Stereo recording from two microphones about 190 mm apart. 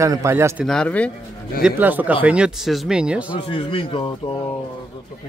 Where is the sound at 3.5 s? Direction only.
30° left (ahead or behind).